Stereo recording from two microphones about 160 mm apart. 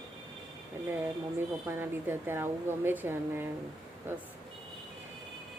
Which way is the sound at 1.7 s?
15° right (ahead or behind).